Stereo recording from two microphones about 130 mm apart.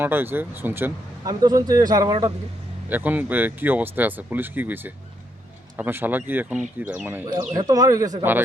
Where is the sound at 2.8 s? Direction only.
15° right (ahead or behind).